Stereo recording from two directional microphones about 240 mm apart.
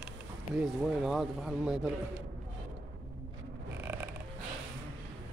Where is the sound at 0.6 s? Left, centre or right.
Centre.